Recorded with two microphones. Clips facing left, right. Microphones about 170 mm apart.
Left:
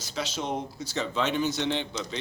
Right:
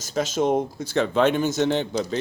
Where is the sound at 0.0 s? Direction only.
45° right (ahead or behind).